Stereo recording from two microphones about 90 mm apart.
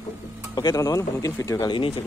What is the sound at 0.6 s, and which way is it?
Speech, 45° left (ahead or behind).